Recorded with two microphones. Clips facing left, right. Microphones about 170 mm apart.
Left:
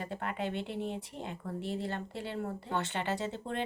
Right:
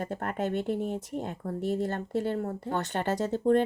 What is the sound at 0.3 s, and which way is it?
Speech, 45° right (ahead or behind).